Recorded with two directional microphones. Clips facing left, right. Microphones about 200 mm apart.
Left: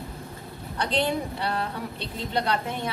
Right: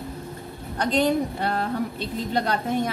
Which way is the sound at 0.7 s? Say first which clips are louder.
Right 4 dB; 45° right (ahead or behind).